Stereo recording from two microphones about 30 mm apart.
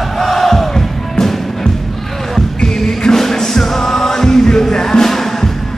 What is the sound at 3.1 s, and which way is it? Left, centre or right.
Music, centre.